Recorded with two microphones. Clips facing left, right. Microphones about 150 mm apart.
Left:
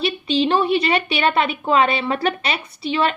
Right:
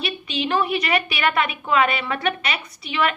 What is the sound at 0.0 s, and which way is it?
A woman's voice, 30° left (ahead or behind).